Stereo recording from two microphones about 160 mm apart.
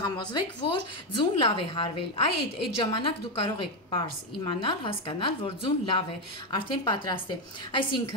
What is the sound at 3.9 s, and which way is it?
A woman's voice, 30° left (ahead or behind).